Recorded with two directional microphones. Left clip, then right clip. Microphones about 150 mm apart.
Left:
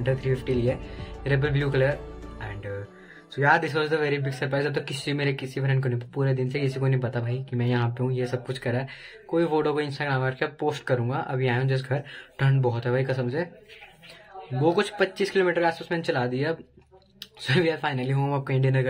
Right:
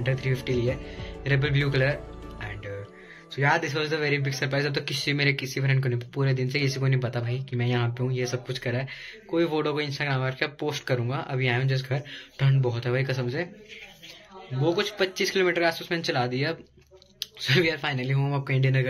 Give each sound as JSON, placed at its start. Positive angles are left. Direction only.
{"t": 0.0, "sound": "speech", "side_deg": 25}
{"t": 3.3, "sound": "speech", "side_deg": 30}
{"t": 14.6, "sound": "speech", "side_deg": 50}
{"t": 15.0, "sound": "speech", "side_deg": 30}